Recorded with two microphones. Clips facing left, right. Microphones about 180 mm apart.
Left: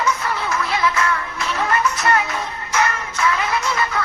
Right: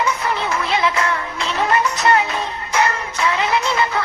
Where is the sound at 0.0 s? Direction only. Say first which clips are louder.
Right 1 dB; 20° right (ahead or behind).